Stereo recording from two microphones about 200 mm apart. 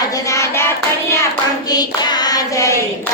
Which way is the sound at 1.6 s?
20° left (ahead or behind).